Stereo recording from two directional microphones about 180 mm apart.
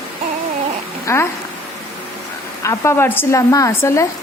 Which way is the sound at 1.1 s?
15° left (ahead or behind).